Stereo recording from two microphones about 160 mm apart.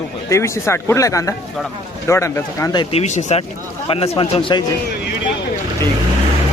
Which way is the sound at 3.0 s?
45° left (ahead or behind).